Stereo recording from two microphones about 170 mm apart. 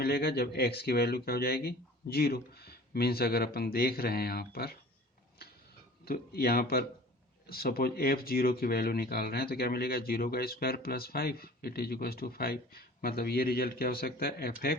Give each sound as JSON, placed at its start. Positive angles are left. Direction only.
{"t": 0.0, "sound": "speech", "side_deg": 65}
{"t": 6.1, "sound": "speech", "side_deg": 65}